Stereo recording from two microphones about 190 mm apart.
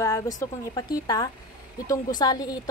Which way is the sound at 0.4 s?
20° left (ahead or behind).